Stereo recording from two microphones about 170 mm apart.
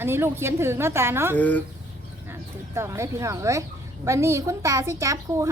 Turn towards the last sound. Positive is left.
turn(degrees=-20)  # may be behind; listen again after turning